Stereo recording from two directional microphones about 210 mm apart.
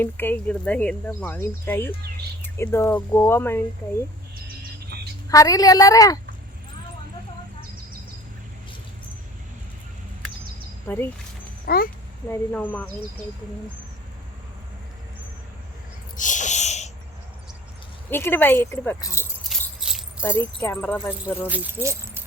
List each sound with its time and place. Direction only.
0.0 s speech: 10° left (ahead or behind)
5.3 s speech: 15° left (ahead or behind)
10.8 s speech: 10° left (ahead or behind)
11.6 s speech: 45° left (ahead or behind)
12.3 s speech: 10° left (ahead or behind)
16.1 s wheeze: 35° left (ahead or behind)
18.1 s speech: 10° left (ahead or behind)
19.5 s keys jangling: centre (ahead or behind)
20.2 s speech: 10° left (ahead or behind)
21.4 s speech: 10° right (ahead or behind)